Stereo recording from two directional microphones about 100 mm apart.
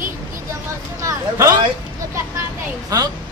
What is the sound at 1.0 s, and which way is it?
Speech, 30° right (ahead or behind).